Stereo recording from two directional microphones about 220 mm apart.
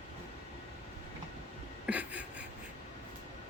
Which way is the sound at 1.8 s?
5° right (ahead or behind).